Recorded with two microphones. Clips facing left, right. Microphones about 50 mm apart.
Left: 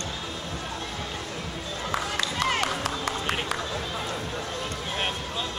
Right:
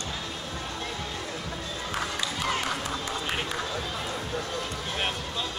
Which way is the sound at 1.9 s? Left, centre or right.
Left.